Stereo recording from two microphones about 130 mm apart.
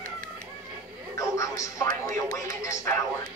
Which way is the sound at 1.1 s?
25° left (ahead or behind).